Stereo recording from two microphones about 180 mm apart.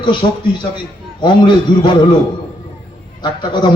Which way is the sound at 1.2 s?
25° left (ahead or behind).